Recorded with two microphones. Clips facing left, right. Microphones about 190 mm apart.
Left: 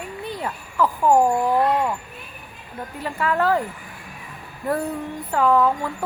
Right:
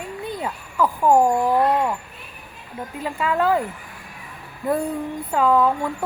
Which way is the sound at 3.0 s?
15° right (ahead or behind).